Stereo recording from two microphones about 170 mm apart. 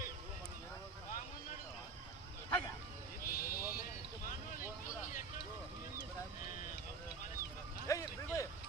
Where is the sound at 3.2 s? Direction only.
60° left (ahead or behind).